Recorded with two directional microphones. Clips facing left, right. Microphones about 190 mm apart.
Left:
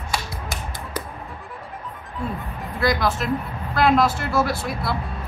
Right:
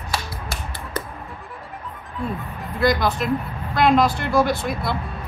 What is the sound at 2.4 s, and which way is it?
Speech, centre (ahead or behind).